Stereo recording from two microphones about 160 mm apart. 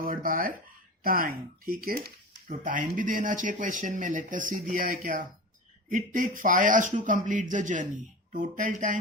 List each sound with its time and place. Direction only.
0.0 s a man's voice: 60° right (ahead or behind)